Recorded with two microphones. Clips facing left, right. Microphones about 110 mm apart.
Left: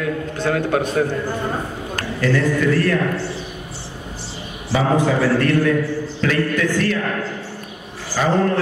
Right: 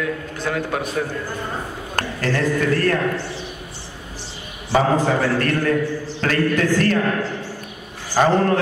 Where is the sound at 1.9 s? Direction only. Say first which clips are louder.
Left 3 dB; 45° right (ahead or behind).